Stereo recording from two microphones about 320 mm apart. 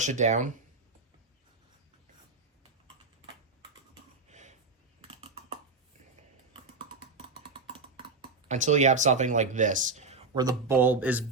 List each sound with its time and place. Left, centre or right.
0.0 s speech: right
4.3 s a sound: right
4.9 s computer keyboard: centre
7.2 s computer keyboard: centre
8.4 s speech: right; by 11.3 s centre